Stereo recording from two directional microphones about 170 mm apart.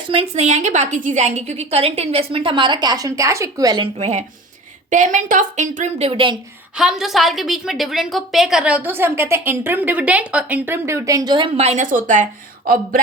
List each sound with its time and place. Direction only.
0.1 s a woman's voice: 35° right (ahead or behind); by 3.8 s 20° right (ahead or behind)
3.9 s a woman's voice: 40° right (ahead or behind)
6.7 s a woman's voice: 5° right (ahead or behind); by 13.0 s 55° right (ahead or behind)